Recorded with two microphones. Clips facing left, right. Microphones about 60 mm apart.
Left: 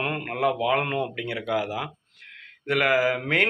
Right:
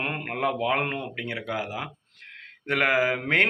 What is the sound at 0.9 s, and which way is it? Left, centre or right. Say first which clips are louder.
Speech: left 4 dB; right.